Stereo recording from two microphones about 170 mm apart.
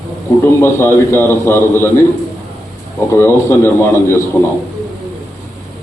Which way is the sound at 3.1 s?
15° left (ahead or behind).